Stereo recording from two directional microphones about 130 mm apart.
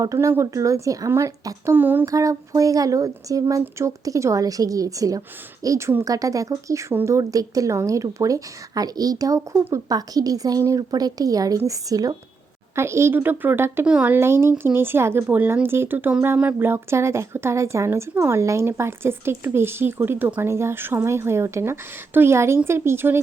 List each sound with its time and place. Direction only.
0.0 s speech: 25° right (ahead or behind)
2.0 s speech: 25° right (ahead or behind)